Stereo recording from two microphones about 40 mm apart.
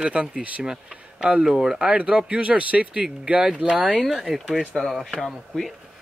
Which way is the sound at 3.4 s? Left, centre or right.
Centre.